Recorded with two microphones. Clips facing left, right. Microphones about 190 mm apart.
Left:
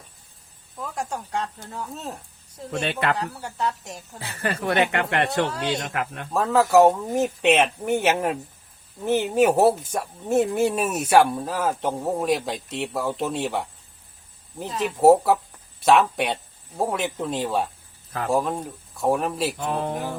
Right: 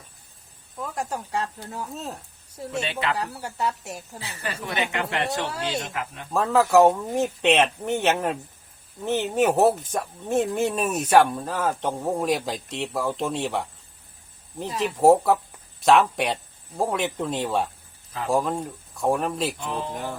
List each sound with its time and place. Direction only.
0.8 s speech: centre (ahead or behind)
2.8 s speech: 55° left (ahead or behind)
3.2 s a woman's voice: 5° right (ahead or behind)
4.2 s speech: 55° left (ahead or behind)
6.3 s speech: centre (ahead or behind)
19.5 s music: 45° left (ahead or behind)